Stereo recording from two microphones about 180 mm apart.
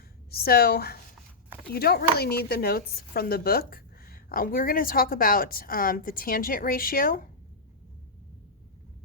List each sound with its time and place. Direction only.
0.3 s a woman's voice: 60° left (ahead or behind)